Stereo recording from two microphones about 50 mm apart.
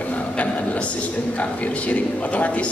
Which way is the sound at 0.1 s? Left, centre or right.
Left.